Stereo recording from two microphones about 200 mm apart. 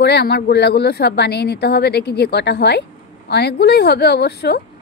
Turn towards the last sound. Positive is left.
turn(degrees=55)  # may be behind; listen again after turning